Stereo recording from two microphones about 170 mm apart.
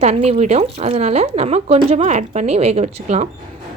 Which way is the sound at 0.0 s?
40° right (ahead or behind).